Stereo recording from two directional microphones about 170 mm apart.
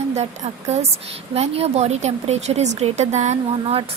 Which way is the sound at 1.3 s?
40° right (ahead or behind).